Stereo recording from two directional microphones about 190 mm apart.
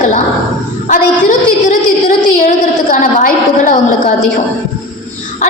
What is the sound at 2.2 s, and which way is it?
A woman's voice, 45° left (ahead or behind).